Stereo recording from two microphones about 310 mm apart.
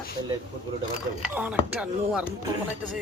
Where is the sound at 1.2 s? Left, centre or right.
Centre.